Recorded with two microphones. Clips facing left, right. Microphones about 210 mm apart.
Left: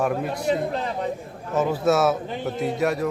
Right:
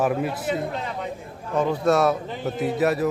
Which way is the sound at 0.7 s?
35° left (ahead or behind).